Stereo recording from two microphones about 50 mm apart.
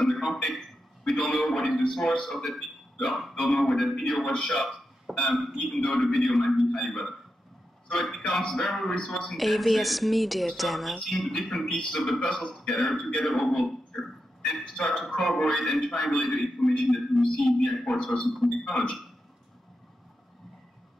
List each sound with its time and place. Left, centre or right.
0.0 s a sound: centre
2.2 s speech: centre
4.6 s a sound: centre
5.3 s a man's voice: centre
17.8 s a man's voice: centre
18.2 s speech: centre
18.6 s a man's voice: centre